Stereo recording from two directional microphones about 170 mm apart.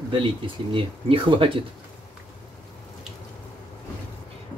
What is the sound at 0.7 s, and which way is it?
Speech, 30° right (ahead or behind).